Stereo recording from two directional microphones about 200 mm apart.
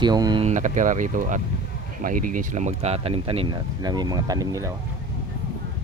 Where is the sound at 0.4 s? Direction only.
35° right (ahead or behind); by 4.7 s 15° right (ahead or behind).